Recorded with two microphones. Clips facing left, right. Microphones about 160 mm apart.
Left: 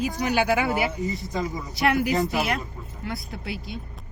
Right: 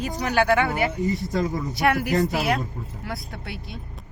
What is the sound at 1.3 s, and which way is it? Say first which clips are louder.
Speech: right 4 dB; 60° right (ahead or behind).